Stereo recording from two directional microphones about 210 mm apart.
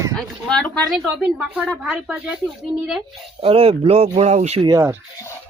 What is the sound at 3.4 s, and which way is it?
Speech, 25° right (ahead or behind).